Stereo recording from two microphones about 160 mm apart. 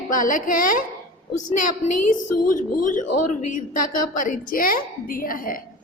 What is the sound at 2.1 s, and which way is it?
Speech, 55° left (ahead or behind).